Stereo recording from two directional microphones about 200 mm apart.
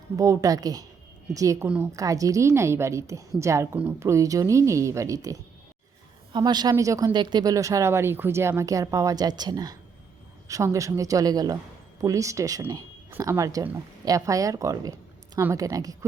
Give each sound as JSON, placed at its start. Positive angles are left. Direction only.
{"t": 0.2, "sound": "speech", "side_deg": -15}